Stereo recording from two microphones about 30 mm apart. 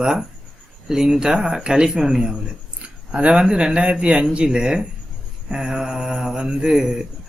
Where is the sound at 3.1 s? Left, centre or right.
Right.